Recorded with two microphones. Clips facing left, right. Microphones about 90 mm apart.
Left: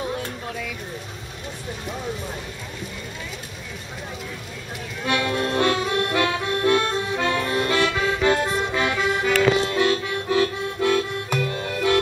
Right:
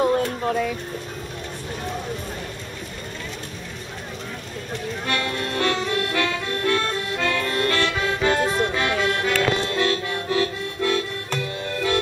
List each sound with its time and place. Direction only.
0.5 s speech: 45° right (ahead or behind)
5.0 s music: 15° left (ahead or behind)
6.1 s accordion: 15° left (ahead or behind)
7.9 s accordion: centre (ahead or behind)